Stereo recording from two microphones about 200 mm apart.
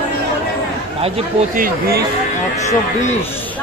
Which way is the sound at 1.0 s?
30° right (ahead or behind).